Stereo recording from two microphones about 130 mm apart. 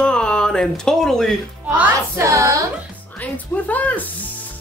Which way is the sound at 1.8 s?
20° right (ahead or behind).